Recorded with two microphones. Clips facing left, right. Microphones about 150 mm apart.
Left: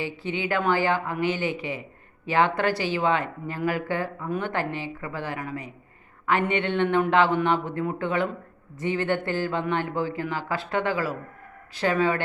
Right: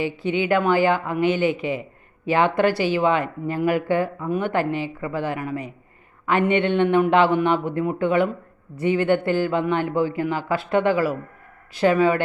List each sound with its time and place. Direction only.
0.0 s speech: 15° right (ahead or behind)